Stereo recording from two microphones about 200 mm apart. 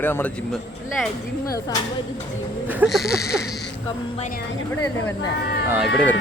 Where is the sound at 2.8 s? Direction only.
Centre (ahead or behind).